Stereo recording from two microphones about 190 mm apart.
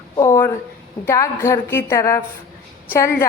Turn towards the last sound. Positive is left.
turn(degrees=15)  # may be behind; listen again after turning